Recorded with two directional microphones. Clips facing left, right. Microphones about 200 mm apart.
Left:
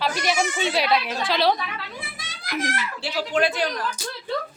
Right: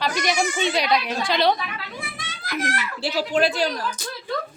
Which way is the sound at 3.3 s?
30° right (ahead or behind).